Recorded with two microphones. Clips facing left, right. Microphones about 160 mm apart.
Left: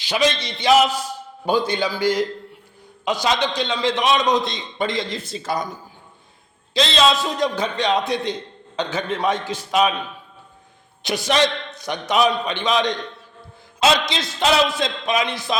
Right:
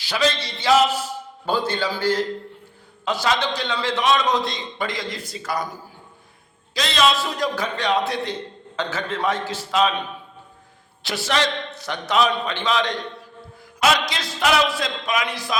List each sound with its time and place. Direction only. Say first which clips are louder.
0.0 s a man's voice: left 2 dB; 20° left (ahead or behind)
6.7 s a man's voice: left 2 dB; 25° left (ahead or behind)
11.0 s a man's voice: left 4 dB; 20° left (ahead or behind)